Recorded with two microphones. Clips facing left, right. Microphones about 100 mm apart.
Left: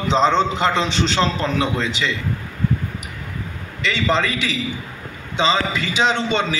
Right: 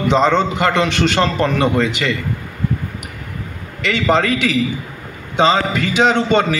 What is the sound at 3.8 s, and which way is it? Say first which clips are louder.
A man's voice: right 4 dB; 55° right (ahead or behind).